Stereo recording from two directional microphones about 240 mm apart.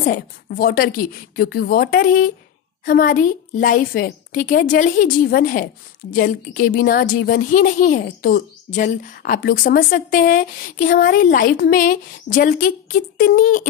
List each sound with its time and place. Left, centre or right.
0.0 s a woman's voice: left